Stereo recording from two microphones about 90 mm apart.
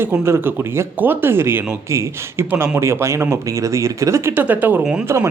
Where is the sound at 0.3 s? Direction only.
30° right (ahead or behind).